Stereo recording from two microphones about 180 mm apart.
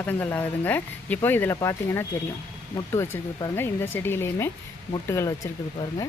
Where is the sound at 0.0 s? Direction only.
10° left (ahead or behind).